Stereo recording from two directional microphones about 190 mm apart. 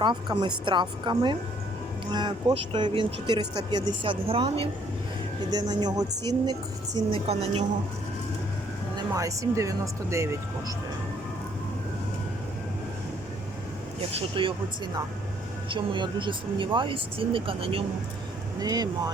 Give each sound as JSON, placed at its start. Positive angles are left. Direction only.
{"t": 0.0, "sound": "speech", "side_deg": -25}
{"t": 7.3, "sound": "speech", "side_deg": -35}
{"t": 9.0, "sound": "speech", "side_deg": -15}
{"t": 14.1, "sound": "speech", "side_deg": -30}
{"t": 15.7, "sound": "speech", "side_deg": -25}